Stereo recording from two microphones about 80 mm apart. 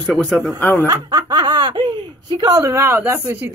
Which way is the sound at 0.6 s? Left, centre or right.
Left.